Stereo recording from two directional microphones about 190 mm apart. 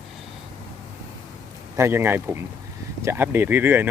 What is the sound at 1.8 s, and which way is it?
Speech, 15° right (ahead or behind).